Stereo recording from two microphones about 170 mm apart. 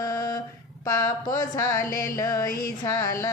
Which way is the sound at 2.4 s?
60° left (ahead or behind).